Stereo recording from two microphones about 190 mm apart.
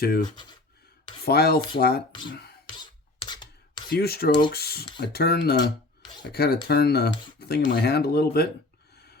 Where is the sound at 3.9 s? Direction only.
55° left (ahead or behind).